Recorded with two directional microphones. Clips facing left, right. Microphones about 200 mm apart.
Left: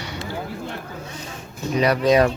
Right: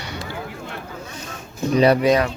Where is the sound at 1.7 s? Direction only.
30° right (ahead or behind).